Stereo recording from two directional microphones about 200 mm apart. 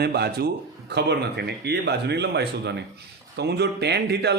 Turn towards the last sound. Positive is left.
turn(degrees=-55)  # may be behind; listen again after turning